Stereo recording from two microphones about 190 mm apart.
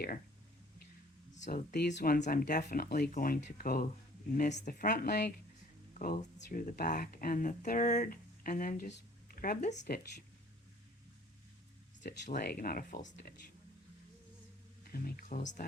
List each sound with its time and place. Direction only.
1.5 s speech: 55° left (ahead or behind)
2.1 s speech: 40° left (ahead or behind); by 5.3 s 60° left (ahead or behind)
5.9 s speech: 45° left (ahead or behind)
9.8 s speech: 55° left (ahead or behind)
12.3 s speech: 50° left (ahead or behind)
14.9 s speech: 50° left (ahead or behind)